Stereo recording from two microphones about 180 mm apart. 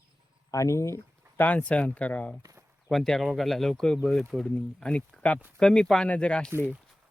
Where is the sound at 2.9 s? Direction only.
Centre (ahead or behind).